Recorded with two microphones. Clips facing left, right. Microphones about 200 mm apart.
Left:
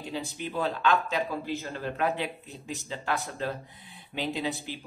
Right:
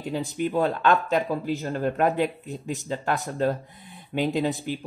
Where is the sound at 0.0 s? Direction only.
50° right (ahead or behind).